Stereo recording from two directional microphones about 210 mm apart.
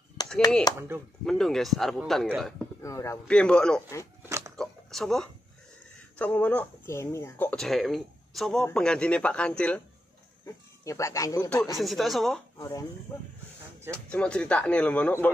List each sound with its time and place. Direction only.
0.2 s chop: 20° left (ahead or behind)
0.7 s speech: 10° right (ahead or behind)
1.2 s speech: centre (ahead or behind)
2.8 s speech: 15° left (ahead or behind)
4.6 s a sound: centre (ahead or behind)
6.1 s speech: 5° left (ahead or behind)
11.7 s speech: centre (ahead or behind)
12.5 s speech: 15° left (ahead or behind)
13.9 s speech: 5° left (ahead or behind)